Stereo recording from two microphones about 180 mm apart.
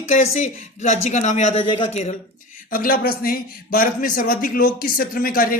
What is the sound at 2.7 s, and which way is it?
A man's voice, 55° left (ahead or behind).